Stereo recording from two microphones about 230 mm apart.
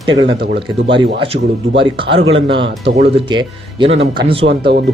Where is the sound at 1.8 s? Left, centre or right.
Right.